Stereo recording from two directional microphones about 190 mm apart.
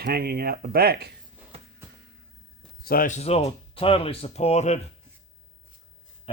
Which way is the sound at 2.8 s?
50° left (ahead or behind).